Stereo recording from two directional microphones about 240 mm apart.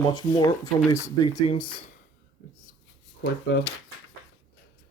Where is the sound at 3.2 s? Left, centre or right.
Left.